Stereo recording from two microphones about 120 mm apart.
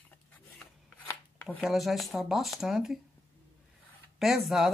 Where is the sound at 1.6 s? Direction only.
Centre (ahead or behind).